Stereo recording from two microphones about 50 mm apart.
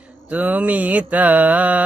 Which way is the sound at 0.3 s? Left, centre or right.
Right.